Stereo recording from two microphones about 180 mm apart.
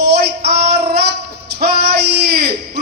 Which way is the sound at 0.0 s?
65° right (ahead or behind).